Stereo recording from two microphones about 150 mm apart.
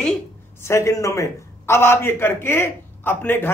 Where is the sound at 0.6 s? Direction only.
20° left (ahead or behind).